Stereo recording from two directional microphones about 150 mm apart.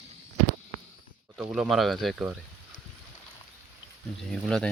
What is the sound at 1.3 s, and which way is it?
Speech, 5° right (ahead or behind).